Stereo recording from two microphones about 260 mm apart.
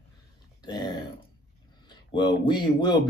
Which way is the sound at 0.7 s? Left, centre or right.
Centre.